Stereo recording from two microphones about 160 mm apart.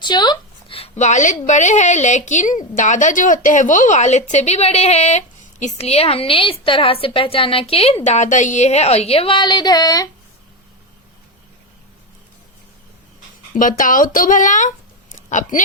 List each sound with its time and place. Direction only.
0.0 s a woman's voice: 25° left (ahead or behind)
13.6 s a woman's voice: 55° left (ahead or behind)